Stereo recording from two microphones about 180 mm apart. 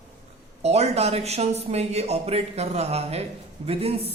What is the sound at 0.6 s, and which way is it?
Speech, 35° right (ahead or behind).